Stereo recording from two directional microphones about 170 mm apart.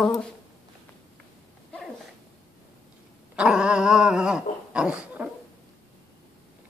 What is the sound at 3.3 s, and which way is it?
Dog, 5° right (ahead or behind).